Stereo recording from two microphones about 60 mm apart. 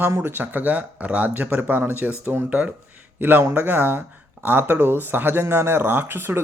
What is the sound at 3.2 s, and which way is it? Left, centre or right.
Speech, right.